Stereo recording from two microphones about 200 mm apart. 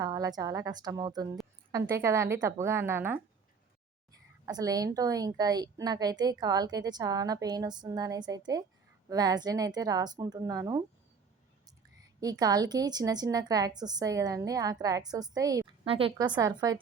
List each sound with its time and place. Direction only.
0.0 s a woman's voice: 15° right (ahead or behind)
12.2 s a woman's voice: 20° right (ahead or behind)